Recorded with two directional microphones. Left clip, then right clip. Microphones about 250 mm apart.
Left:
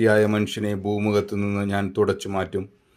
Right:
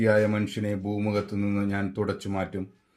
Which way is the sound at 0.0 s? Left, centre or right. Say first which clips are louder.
Left 4 dB; left.